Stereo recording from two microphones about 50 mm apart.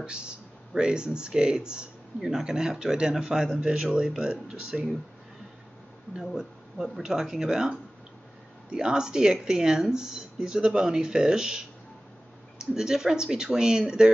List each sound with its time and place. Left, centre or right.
0.0 s speech: centre
6.2 s speech: centre